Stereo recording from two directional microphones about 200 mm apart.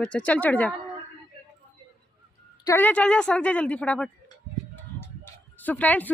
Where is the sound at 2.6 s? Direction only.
10° left (ahead or behind).